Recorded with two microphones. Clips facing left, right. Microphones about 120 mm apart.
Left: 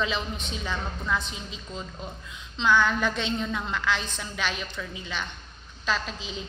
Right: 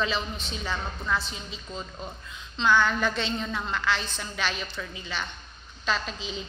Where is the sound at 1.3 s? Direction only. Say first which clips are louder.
Even; 10° left (ahead or behind).